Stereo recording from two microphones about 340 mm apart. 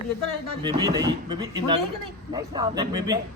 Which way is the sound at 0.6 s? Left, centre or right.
Centre.